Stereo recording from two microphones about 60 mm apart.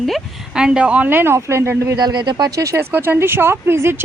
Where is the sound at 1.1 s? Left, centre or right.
Right.